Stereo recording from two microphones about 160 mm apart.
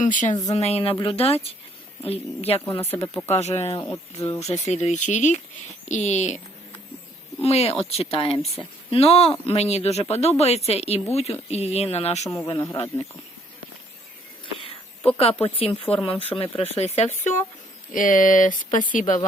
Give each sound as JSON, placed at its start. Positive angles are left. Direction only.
{"t": 0.0, "sound": "speech", "side_deg": 50}
{"t": 0.5, "sound": "speech", "side_deg": 40}
{"t": 2.8, "sound": "speech", "side_deg": 15}
{"t": 3.2, "sound": "speech", "side_deg": 40}
{"t": 3.9, "sound": "speech", "side_deg": 20}
{"t": 4.4, "sound": "speech", "side_deg": 45}
{"t": 7.4, "sound": "speech", "side_deg": 40}
{"t": 14.4, "sound": "speech", "side_deg": 35}
{"t": 17.9, "sound": "speech", "side_deg": 55}